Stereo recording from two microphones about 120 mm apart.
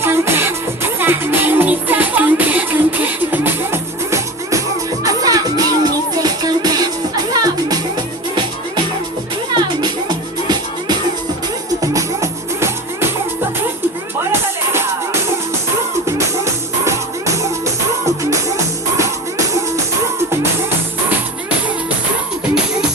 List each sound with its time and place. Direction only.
0.0 s music: 20° right (ahead or behind)
9.6 s music: 35° right (ahead or behind)
11.8 s music: 25° right (ahead or behind)
16.0 s music: 25° right (ahead or behind)